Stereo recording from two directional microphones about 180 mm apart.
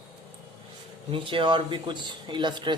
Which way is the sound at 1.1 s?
30° right (ahead or behind).